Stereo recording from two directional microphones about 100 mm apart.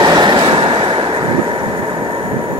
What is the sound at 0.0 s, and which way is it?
Train, 45° right (ahead or behind).